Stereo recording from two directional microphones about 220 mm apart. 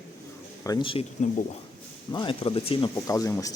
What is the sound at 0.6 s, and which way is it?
Speech, 20° left (ahead or behind).